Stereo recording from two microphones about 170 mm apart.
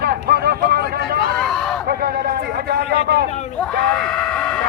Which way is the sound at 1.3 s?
5° left (ahead or behind).